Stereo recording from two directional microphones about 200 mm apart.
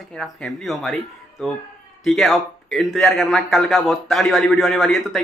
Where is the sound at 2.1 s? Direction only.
Centre (ahead or behind).